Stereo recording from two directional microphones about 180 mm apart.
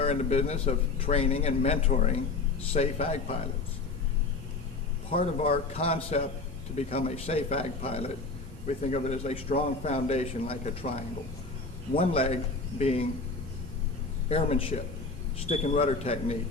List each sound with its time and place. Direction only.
0.0 s a man's voice: 35° left (ahead or behind)
5.1 s a man's voice: 35° left (ahead or behind)
11.9 s a man's voice: 35° left (ahead or behind)
14.3 s a man's voice: 35° left (ahead or behind)